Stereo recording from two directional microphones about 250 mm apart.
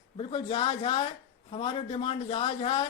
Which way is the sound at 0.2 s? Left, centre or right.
Left.